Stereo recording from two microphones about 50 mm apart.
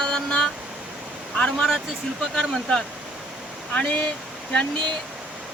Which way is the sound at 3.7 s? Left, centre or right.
Left.